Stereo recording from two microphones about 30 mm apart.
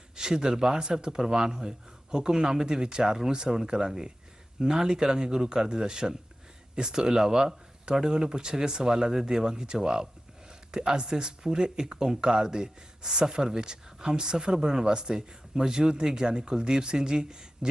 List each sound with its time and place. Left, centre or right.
0.2 s a man's voice: right